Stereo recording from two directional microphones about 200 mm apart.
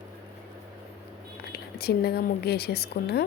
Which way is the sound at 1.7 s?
50° left (ahead or behind).